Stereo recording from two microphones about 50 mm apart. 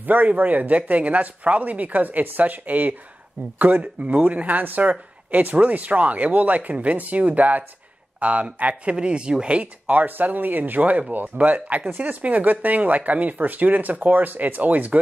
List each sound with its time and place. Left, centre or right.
0.0 s speech: right